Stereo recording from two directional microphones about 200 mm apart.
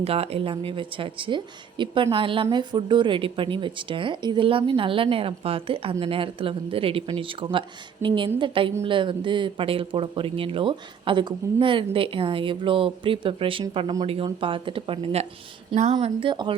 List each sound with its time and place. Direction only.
0.0 s speech: 30° right (ahead or behind)